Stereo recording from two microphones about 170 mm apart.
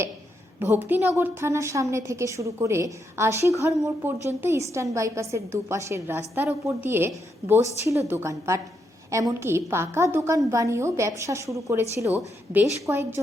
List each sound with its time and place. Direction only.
0.9 s a woman's voice: 10° right (ahead or behind)